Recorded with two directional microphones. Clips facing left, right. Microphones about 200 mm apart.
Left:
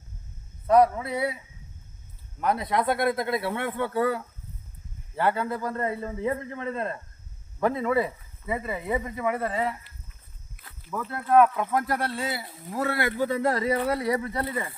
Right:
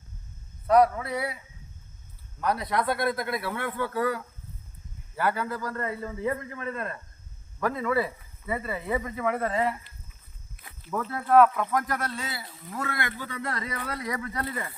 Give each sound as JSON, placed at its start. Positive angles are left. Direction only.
{"t": 0.7, "sound": "a man's voice", "side_deg": 25}
{"t": 2.4, "sound": "a man's voice", "side_deg": 20}
{"t": 11.0, "sound": "speech", "side_deg": 15}
{"t": 11.7, "sound": "a man's voice", "side_deg": 30}